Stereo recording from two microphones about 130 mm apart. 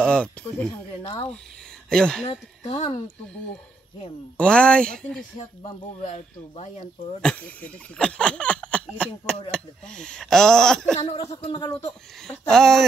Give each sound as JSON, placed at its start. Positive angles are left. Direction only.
{"t": 0.0, "sound": "speech", "side_deg": 10}
{"t": 1.9, "sound": "speech", "side_deg": 5}
{"t": 2.2, "sound": "speech", "side_deg": 60}
{"t": 4.4, "sound": "speech", "side_deg": 10}
{"t": 5.6, "sound": "speech", "side_deg": 45}
{"t": 6.1, "sound": "speech", "side_deg": 60}
{"t": 7.2, "sound": "speech", "side_deg": 10}
{"t": 11.2, "sound": "speech", "side_deg": 45}
{"t": 11.6, "sound": "speech", "side_deg": 30}
{"t": 12.3, "sound": "speech", "side_deg": 5}